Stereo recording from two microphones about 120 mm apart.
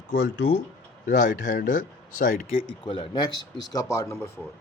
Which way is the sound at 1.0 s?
90° left.